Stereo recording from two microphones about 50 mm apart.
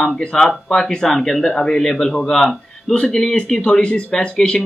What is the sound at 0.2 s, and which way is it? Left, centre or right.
Speech, centre.